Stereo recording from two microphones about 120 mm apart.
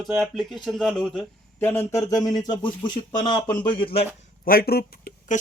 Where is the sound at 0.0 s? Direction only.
Centre (ahead or behind).